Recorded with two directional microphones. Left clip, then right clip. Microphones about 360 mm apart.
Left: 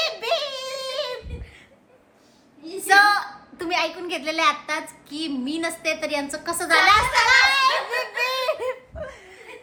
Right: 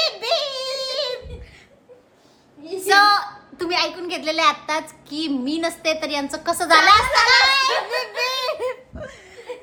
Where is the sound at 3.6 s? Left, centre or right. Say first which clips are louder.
Right 2 dB; centre.